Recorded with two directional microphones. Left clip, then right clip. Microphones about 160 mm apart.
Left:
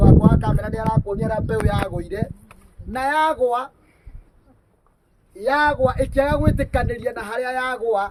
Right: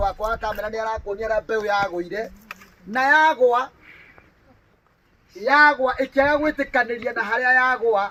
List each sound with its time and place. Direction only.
0.2 s speech: 35° left (ahead or behind)
5.5 s speech: 40° left (ahead or behind)